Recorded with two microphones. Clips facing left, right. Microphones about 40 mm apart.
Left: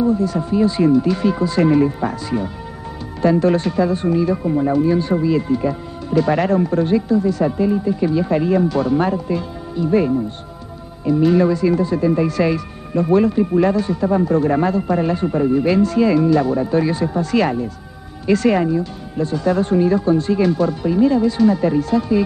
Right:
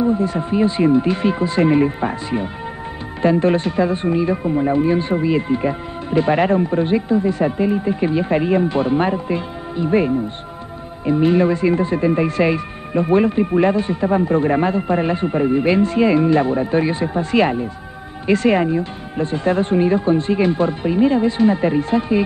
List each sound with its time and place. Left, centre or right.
0.0 s speech: right